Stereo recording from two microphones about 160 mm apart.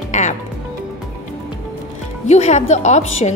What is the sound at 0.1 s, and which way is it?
Music, 50° left (ahead or behind).